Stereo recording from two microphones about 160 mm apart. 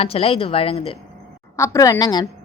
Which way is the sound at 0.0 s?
40° left (ahead or behind).